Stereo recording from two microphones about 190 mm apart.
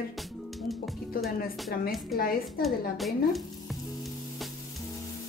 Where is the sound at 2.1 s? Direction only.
50° left (ahead or behind).